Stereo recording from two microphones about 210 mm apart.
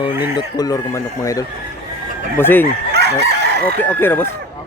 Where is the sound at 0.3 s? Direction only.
20° left (ahead or behind).